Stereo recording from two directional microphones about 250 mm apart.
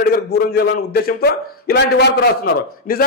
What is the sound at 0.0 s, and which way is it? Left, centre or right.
A man's voice, left.